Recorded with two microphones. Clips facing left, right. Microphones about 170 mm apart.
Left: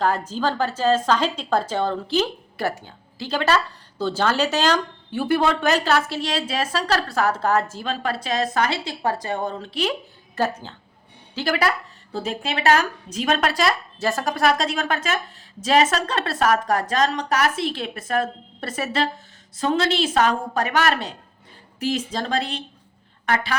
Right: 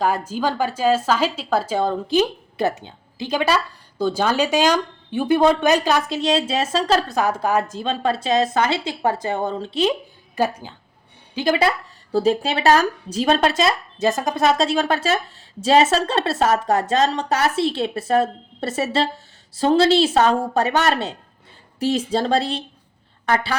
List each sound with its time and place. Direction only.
0.0 s a woman's voice: 10° right (ahead or behind)
10.3 s a woman's voice: 10° right (ahead or behind)
11.3 s a woman's voice: 20° right (ahead or behind)
12.1 s a woman's voice: 35° right (ahead or behind)